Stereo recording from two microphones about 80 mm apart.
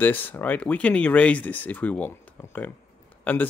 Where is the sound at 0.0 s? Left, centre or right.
Left.